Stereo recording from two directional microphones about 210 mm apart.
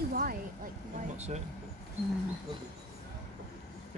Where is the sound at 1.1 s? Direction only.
30° right (ahead or behind).